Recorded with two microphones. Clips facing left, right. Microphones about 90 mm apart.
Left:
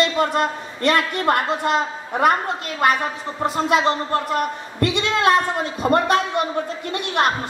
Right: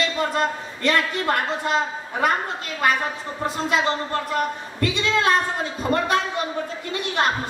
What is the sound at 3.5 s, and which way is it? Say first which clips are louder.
A woman's voice: left 4 dB; 55° left (ahead or behind).